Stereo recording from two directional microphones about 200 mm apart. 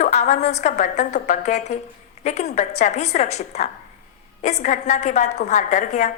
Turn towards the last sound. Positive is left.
turn(degrees=40)  # may be behind; listen again after turning